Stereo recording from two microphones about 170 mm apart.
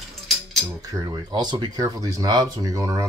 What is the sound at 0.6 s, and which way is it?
Cutlery, 10° right (ahead or behind).